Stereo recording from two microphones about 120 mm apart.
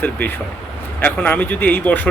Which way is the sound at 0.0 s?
15° left (ahead or behind).